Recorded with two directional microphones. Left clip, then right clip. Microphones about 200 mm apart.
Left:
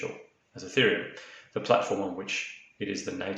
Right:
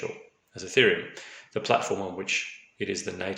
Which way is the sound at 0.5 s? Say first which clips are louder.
Right 3 dB; 40° right (ahead or behind).